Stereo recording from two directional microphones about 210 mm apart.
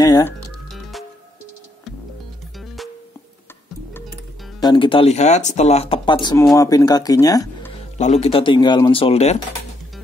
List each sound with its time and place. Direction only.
0.0 s music: 20° left (ahead or behind)
0.7 s music: centre (ahead or behind)
2.6 s music: centre (ahead or behind)
4.6 s speech: 20° left (ahead or behind)
8.0 s speech: 30° left (ahead or behind)